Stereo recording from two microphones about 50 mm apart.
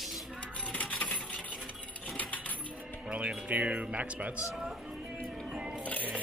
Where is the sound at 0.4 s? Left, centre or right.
Left.